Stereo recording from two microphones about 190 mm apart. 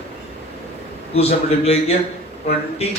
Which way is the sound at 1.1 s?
35° left (ahead or behind).